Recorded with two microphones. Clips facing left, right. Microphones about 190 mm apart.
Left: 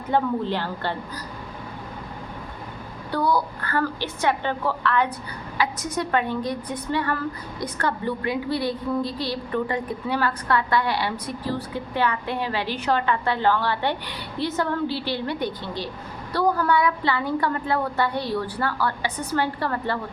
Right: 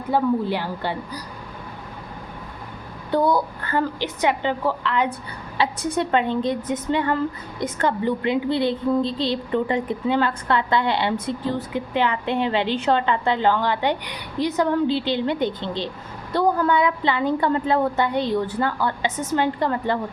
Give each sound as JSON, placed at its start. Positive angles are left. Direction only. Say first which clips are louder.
{"t": 0.1, "sound": "a woman's voice", "louder": "right 2 dB", "side_deg": -10}
{"t": 3.1, "sound": "a woman's voice", "louder": "right 3 dB", "side_deg": -20}
{"t": 5.5, "sound": "a woman's voice", "louder": "right 3 dB", "side_deg": -30}